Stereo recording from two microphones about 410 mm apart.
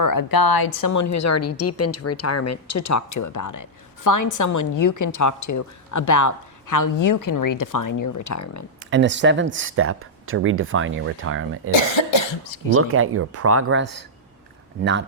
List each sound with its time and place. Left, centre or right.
0.0 s a woman's voice: left
8.8 s speech: right
11.8 s cough: left
12.7 s speech: right